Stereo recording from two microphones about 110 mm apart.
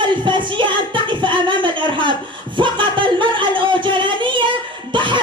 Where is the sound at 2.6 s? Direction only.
50° right (ahead or behind).